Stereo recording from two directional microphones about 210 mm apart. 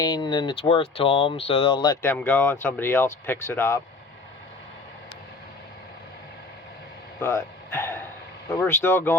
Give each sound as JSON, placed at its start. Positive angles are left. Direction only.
{"t": 0.0, "sound": "speech", "side_deg": 20}
{"t": 7.2, "sound": "a sound", "side_deg": 10}
{"t": 8.5, "sound": "speech", "side_deg": 10}